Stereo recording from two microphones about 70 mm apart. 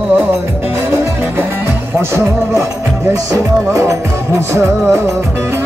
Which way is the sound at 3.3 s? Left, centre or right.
Right.